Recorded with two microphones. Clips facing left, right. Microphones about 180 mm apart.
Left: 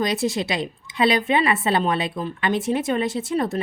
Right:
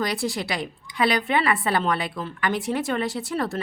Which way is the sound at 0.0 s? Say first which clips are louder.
Left 4 dB; 20° left (ahead or behind).